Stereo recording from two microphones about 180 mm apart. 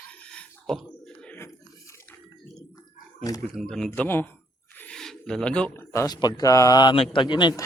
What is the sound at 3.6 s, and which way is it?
Speech, 5° left (ahead or behind).